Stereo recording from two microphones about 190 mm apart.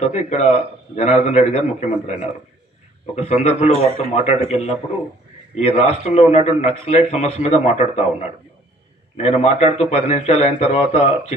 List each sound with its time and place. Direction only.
0.0 s a man's voice: 35° left (ahead or behind)
3.2 s a man's voice: 35° left (ahead or behind)
3.7 s a man's voice: 30° right (ahead or behind)
4.1 s a man's voice: 35° left (ahead or behind)
9.1 s a man's voice: 35° left (ahead or behind)